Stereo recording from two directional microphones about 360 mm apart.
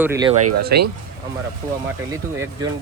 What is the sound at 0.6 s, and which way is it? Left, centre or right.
Speech, right.